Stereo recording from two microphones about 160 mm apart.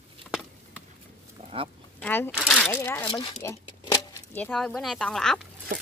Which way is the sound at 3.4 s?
20° left (ahead or behind).